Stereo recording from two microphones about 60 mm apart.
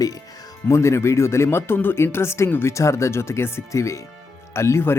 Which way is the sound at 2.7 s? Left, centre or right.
Left.